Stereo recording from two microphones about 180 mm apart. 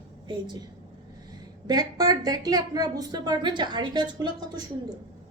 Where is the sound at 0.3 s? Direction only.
25° right (ahead or behind).